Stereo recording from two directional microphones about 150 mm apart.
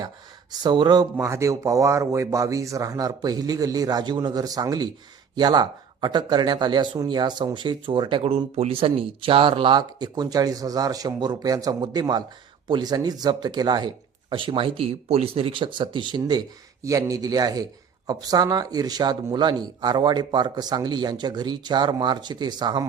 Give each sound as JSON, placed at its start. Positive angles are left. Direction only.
{"t": 0.6, "sound": "speech", "side_deg": -30}
{"t": 1.1, "sound": "speech", "side_deg": -20}